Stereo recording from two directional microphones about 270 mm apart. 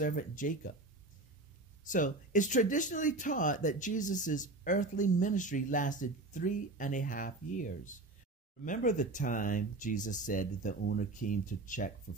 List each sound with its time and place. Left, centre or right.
0.0 s speech: left
1.9 s speech: left